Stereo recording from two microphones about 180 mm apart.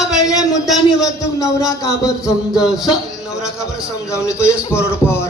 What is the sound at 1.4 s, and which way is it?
Speech, 20° left (ahead or behind).